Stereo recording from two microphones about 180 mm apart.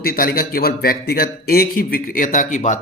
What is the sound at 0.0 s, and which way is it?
A man's voice, 55° left (ahead or behind).